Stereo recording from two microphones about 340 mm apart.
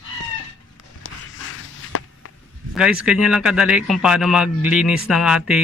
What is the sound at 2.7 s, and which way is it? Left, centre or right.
A man's voice, centre.